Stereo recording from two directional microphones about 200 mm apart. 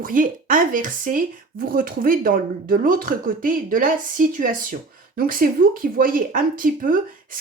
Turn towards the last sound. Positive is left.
turn(degrees=-45)  # may be behind; listen again after turning